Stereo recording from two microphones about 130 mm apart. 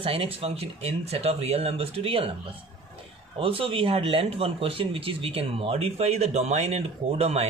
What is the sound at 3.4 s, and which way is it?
Speech, 45° right (ahead or behind).